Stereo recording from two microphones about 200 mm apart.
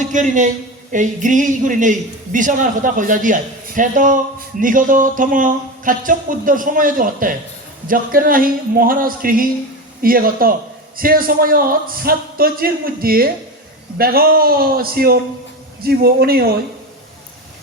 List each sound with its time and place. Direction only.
0.0 s a man's voice: 40° right (ahead or behind)